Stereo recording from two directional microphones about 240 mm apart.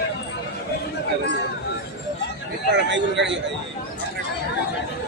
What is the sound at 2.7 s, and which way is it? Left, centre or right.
Speech, right.